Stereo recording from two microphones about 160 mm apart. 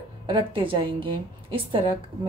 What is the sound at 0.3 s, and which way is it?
A woman's voice, 35° right (ahead or behind).